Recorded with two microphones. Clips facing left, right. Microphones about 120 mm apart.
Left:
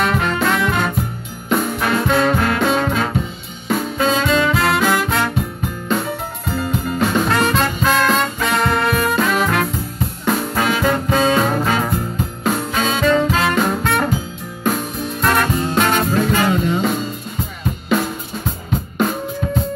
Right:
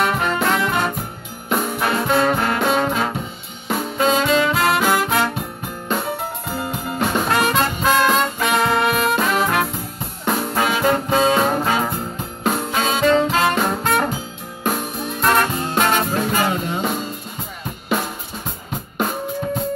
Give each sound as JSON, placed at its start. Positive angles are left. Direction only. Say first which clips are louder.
{"t": 0.0, "sound": "music", "louder": "left 1 dB", "side_deg": -15}
{"t": 6.5, "sound": "music", "louder": "left 6 dB", "side_deg": -20}
{"t": 13.6, "sound": "music", "louder": "left 1 dB", "side_deg": -15}
{"t": 15.1, "sound": "music", "louder": "left 1 dB", "side_deg": -20}